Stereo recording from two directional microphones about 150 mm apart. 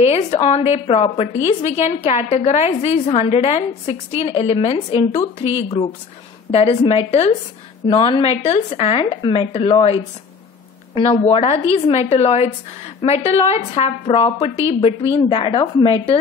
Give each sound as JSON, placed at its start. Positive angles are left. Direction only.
{"t": 0.0, "sound": "a woman's voice", "side_deg": 45}
{"t": 6.5, "sound": "a woman's voice", "side_deg": 40}
{"t": 11.0, "sound": "a woman's voice", "side_deg": 40}